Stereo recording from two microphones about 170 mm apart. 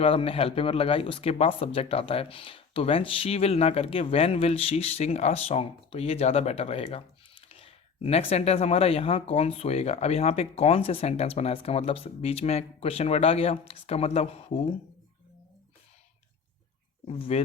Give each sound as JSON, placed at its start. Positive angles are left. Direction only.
{"t": 0.0, "sound": "speech", "side_deg": 35}
{"t": 17.1, "sound": "speech", "side_deg": 35}